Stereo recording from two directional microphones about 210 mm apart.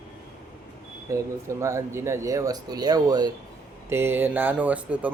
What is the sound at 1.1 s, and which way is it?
Speech, 15° right (ahead or behind).